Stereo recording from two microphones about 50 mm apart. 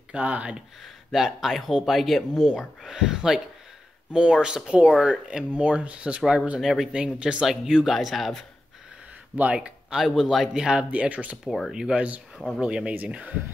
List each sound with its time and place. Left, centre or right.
0.1 s speech: right
0.8 s speech: centre; by 6.6 s right
6.6 s speech: centre
6.9 s speech: right
7.9 s speech: centre
9.4 s speech: right
9.9 s speech: centre
10.5 s speech: centre
11.7 s speech: centre; by 13.3 s right